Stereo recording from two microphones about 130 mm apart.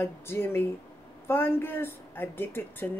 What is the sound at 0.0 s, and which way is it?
A woman's voice, 15° left (ahead or behind).